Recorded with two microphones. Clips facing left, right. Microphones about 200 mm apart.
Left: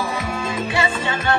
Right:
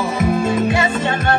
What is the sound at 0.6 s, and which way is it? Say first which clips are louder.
Music: right 5 dB; 45° right (ahead or behind).